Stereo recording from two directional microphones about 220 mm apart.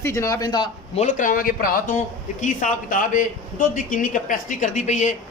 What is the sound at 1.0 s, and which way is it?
A man's voice, 35° left (ahead or behind).